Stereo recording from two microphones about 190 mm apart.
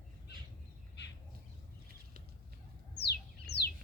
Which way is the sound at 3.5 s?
35° left (ahead or behind).